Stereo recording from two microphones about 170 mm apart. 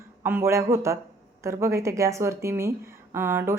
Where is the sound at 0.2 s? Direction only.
15° right (ahead or behind).